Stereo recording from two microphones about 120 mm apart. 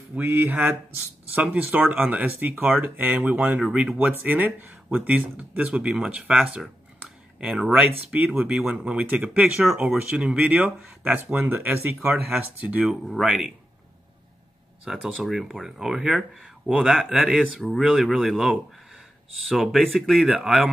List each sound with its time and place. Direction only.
0.1 s speech: 20° right (ahead or behind); by 13.5 s 5° right (ahead or behind)
14.9 s speech: centre (ahead or behind)